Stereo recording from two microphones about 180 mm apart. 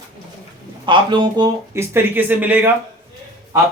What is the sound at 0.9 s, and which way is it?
Speech, 25° right (ahead or behind).